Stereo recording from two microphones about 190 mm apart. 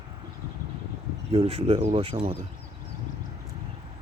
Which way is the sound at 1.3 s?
30° right (ahead or behind).